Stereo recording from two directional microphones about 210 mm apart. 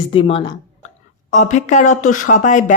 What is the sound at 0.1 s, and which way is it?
Speech, 25° left (ahead or behind).